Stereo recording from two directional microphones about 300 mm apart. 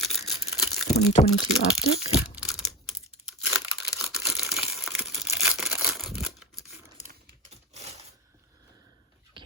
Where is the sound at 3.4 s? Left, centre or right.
Centre.